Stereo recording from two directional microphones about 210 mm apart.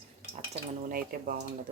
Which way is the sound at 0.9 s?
45° right (ahead or behind).